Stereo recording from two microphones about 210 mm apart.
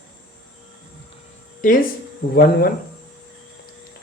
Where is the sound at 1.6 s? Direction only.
40° left (ahead or behind).